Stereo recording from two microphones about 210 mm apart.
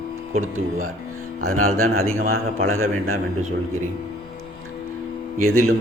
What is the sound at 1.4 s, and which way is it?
Speech, 90° right.